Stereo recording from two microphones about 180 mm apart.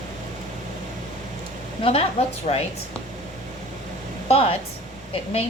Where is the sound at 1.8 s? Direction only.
30° left (ahead or behind).